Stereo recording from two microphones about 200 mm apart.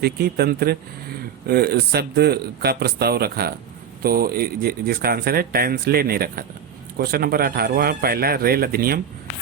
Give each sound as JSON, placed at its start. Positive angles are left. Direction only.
{"t": 0.0, "sound": "speech", "side_deg": -50}